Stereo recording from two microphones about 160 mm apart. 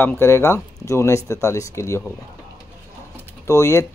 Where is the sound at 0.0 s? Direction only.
15° left (ahead or behind).